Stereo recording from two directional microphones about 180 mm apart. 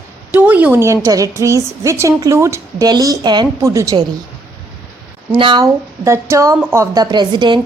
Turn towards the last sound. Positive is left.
turn(degrees=-25)  # may be behind; listen again after turning